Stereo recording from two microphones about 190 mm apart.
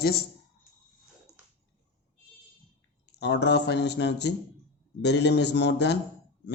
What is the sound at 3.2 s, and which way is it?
Speech, 65° left (ahead or behind).